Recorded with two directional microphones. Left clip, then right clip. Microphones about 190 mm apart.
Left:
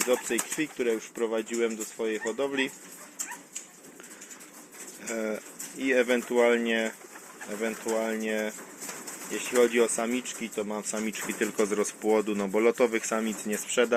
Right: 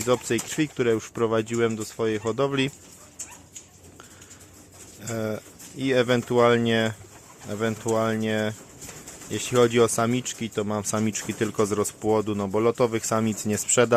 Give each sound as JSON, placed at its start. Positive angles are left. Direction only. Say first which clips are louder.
{"t": 0.1, "sound": "speech", "louder": "right 3 dB", "side_deg": -50}
{"t": 5.0, "sound": "speech", "louder": "right 2 dB", "side_deg": -20}